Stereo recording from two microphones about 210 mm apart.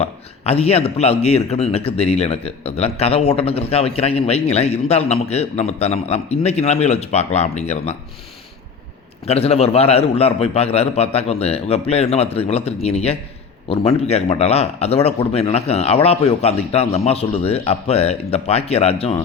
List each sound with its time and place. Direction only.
0.0 s a man's voice: 30° left (ahead or behind)
9.2 s speech: 30° left (ahead or behind)